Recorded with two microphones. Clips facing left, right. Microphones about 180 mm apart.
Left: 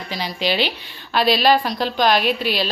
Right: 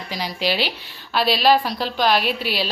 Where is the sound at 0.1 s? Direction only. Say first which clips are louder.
Left 1 dB; 10° right (ahead or behind).